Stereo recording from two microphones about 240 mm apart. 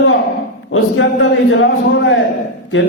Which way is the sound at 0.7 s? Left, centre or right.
Left.